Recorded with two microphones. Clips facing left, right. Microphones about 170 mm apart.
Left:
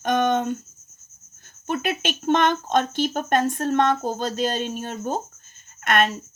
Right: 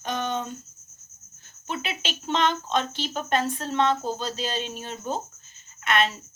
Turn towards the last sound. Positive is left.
turn(degrees=50)  # may be behind; listen again after turning